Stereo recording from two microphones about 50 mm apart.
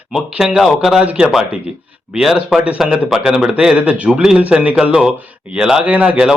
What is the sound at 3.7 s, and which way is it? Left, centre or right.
A man's voice, right.